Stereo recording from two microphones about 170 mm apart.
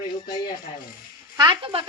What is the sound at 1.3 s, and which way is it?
Speech, 25° right (ahead or behind).